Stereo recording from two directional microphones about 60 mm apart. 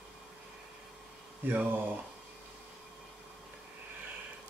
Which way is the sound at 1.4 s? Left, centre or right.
Right.